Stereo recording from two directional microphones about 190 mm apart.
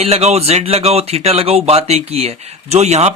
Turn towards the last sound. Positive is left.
turn(degrees=-35)  # may be behind; listen again after turning